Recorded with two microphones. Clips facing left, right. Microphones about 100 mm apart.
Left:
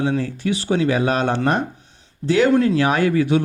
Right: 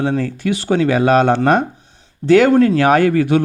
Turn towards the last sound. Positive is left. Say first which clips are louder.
# right 4 dB
turn(degrees=-55)  # may be behind; listen again after turning